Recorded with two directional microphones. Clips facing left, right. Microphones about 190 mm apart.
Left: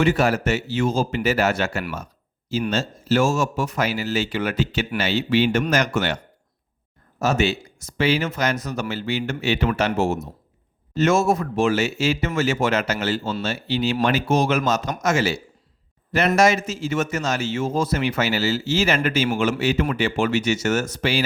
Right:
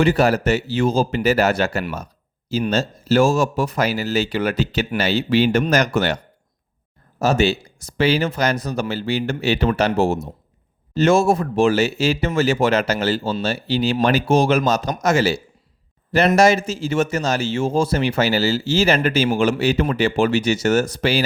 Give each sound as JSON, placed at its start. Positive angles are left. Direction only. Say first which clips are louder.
{"t": 0.0, "sound": "a man's voice", "louder": "right 3 dB", "side_deg": -35}
{"t": 7.2, "sound": "a man's voice", "louder": "right 3 dB", "side_deg": -35}